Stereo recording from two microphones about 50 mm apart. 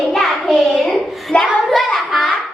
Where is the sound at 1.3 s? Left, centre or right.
Left.